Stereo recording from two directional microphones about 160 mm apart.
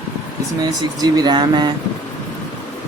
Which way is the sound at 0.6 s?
25° right (ahead or behind).